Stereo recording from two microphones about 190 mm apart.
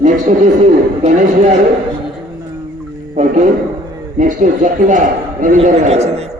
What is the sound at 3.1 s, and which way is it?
A man's voice, 40° right (ahead or behind).